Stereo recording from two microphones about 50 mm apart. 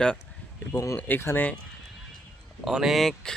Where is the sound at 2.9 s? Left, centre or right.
Centre.